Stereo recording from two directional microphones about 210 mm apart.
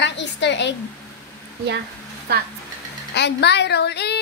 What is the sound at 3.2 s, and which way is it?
A woman's voice, 55° left (ahead or behind).